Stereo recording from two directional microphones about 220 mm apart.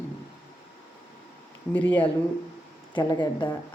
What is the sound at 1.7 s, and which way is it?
Speech, 10° left (ahead or behind).